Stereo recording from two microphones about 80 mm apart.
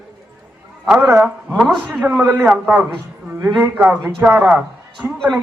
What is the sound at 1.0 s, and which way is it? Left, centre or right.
Speech, right.